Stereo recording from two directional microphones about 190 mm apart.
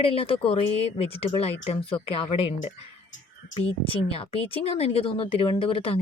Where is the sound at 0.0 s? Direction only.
30° left (ahead or behind).